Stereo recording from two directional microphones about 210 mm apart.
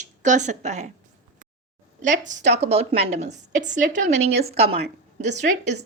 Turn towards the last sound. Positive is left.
turn(degrees=-35)  # may be behind; listen again after turning